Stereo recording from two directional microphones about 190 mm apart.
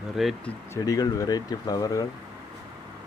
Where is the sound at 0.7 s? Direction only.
20° left (ahead or behind).